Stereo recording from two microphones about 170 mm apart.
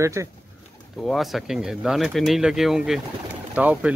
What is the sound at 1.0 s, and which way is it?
Speech, centre (ahead or behind).